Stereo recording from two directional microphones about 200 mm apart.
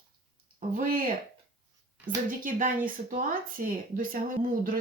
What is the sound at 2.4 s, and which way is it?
Speech, 40° right (ahead or behind).